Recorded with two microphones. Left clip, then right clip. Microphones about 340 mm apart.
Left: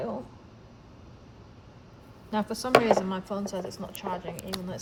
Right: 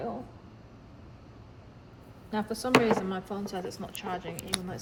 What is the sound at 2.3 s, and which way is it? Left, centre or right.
Speech, left.